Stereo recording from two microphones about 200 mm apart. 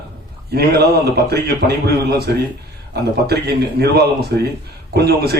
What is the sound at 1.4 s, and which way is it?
A man's voice, 50° right (ahead or behind).